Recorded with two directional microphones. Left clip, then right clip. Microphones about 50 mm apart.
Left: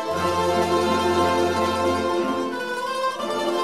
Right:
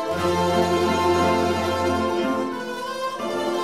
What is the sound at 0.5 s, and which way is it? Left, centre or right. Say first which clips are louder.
Music: even; centre.